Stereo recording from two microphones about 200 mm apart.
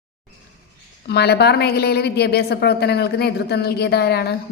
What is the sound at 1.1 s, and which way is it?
A woman's voice, 55° left (ahead or behind).